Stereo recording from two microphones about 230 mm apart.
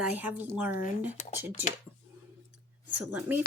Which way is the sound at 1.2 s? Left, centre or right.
Left.